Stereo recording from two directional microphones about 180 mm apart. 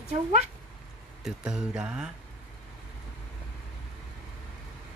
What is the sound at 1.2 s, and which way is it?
Speech, 5° right (ahead or behind).